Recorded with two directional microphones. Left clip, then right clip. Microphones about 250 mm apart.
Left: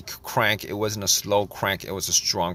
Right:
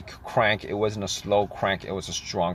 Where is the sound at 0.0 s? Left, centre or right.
Left.